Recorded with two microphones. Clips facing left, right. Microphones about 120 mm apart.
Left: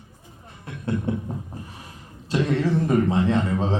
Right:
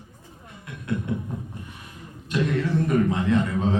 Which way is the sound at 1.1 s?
30° left (ahead or behind).